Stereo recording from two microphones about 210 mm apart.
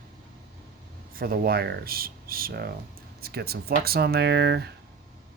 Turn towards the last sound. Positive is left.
turn(degrees=-50)  # may be behind; listen again after turning